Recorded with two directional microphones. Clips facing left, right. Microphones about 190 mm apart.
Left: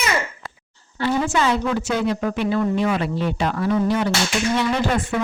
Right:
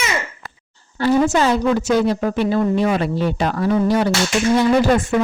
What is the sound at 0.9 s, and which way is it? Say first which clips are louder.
A woman's voice: right 5 dB; 40° right (ahead or behind).